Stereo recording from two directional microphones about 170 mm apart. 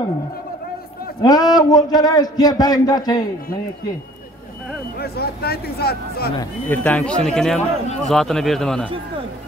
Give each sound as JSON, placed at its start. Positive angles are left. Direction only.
{"t": 1.2, "sound": "a man's voice", "side_deg": 25}
{"t": 4.9, "sound": "speech", "side_deg": 70}
{"t": 6.7, "sound": "speech", "side_deg": 10}